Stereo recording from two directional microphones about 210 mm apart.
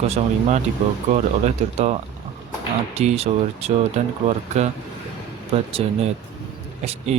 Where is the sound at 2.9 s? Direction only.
30° right (ahead or behind).